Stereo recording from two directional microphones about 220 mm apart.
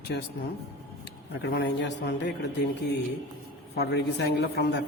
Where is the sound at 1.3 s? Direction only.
50° left (ahead or behind).